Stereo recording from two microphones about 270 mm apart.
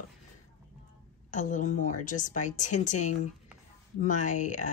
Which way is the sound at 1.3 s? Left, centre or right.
Left.